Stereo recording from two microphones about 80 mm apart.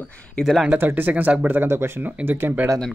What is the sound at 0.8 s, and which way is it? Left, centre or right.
Speech, right.